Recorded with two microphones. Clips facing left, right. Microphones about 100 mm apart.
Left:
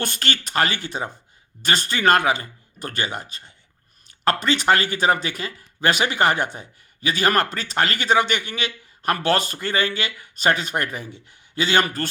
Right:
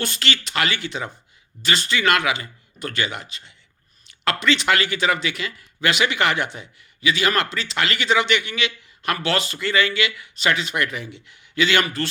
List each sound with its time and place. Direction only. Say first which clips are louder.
0.0 s speech: even; 45° left (ahead or behind)